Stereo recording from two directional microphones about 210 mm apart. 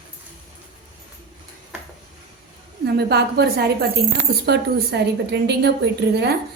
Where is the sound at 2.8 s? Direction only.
50° right (ahead or behind).